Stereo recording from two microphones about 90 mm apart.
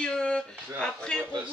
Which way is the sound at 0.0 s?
10° left (ahead or behind).